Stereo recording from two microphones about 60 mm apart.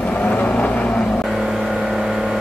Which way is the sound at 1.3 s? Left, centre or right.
Centre.